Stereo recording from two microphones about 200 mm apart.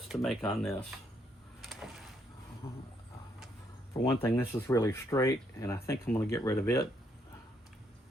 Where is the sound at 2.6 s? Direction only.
30° left (ahead or behind).